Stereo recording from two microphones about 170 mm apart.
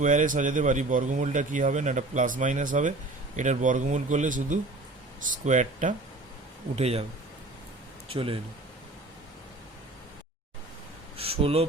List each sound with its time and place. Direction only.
0.0 s speech: 50° right (ahead or behind)
8.1 s speech: 35° right (ahead or behind)
11.2 s speech: 35° right (ahead or behind)